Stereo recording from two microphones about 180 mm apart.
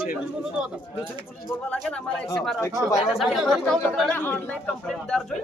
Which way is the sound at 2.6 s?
20° left (ahead or behind).